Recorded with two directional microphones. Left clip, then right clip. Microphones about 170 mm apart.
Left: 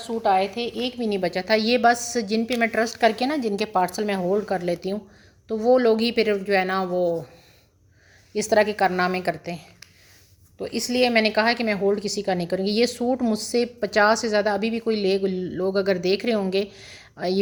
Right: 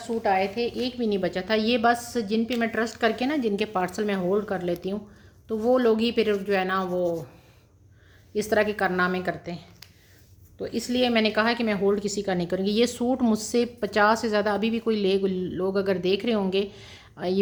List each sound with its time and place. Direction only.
0.1 s a woman's voice: 25° left (ahead or behind)
0.4 s a woman's voice: 10° right (ahead or behind)
0.8 s a woman's voice: 25° left (ahead or behind)
8.3 s a woman's voice: 25° left (ahead or behind)